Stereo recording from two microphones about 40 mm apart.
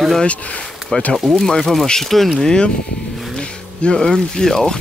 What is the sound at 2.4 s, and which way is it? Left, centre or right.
Speech, centre.